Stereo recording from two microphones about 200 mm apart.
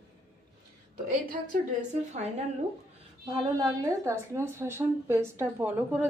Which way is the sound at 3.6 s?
15° right (ahead or behind).